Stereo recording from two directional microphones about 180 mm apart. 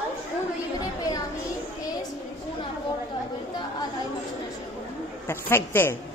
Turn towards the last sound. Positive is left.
turn(degrees=10)  # may be behind; listen again after turning